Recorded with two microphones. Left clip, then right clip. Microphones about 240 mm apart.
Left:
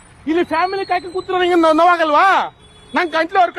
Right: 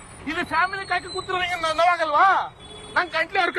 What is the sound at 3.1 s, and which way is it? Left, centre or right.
Speech, left.